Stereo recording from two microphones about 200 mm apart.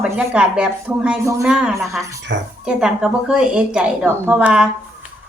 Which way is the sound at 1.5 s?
5° right (ahead or behind).